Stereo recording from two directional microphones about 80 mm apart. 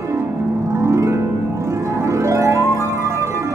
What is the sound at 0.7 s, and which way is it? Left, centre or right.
Harp, right.